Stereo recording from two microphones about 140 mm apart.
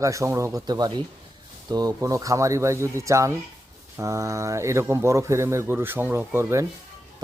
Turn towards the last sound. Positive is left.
turn(degrees=-20)  # may be behind; listen again after turning